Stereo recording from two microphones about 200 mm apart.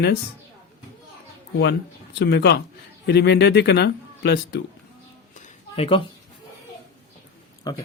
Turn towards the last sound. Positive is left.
turn(degrees=15)  # may be behind; listen again after turning